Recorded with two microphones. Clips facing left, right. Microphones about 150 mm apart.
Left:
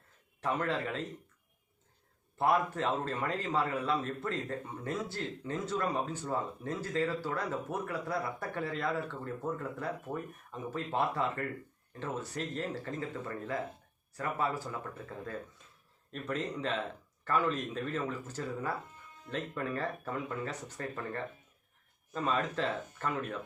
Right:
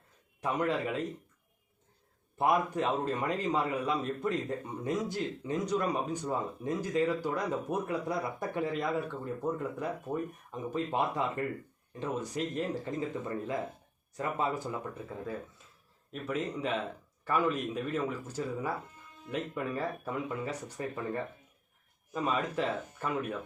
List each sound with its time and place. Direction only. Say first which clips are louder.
0.4 s a man's voice: right 2 dB; 15° right (ahead or behind)
2.4 s a man's voice: right 1 dB; 15° right (ahead or behind)